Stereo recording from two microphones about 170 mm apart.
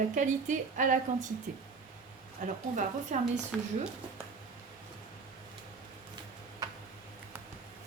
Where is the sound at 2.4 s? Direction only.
45° right (ahead or behind).